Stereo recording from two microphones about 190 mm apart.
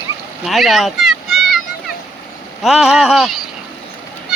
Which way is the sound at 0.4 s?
Centre (ahead or behind).